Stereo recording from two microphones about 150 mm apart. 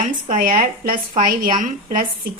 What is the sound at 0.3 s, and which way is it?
Speech, 65° right (ahead or behind).